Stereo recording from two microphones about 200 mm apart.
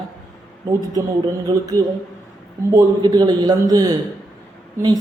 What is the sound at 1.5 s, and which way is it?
Speech, 20° right (ahead or behind).